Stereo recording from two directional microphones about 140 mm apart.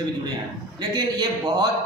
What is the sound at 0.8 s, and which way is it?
Speech, 30° right (ahead or behind).